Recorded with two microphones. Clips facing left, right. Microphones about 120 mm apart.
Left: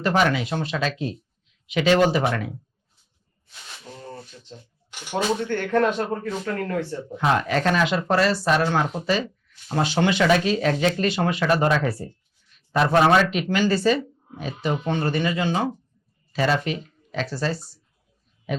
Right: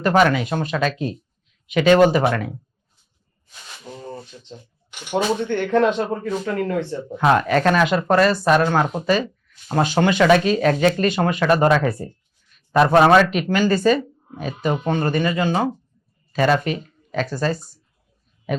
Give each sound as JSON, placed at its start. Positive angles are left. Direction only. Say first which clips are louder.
{"t": 0.0, "sound": "speech", "louder": "right 4 dB", "side_deg": -50}
{"t": 3.8, "sound": "a sound", "louder": "right 5 dB", "side_deg": -15}
{"t": 5.1, "sound": "speech", "louder": "right 3 dB", "side_deg": -20}
{"t": 7.1, "sound": "a man's voice", "louder": "right 5 dB", "side_deg": -55}